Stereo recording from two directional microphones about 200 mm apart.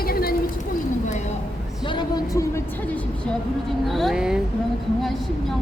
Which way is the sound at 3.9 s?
Centre (ahead or behind).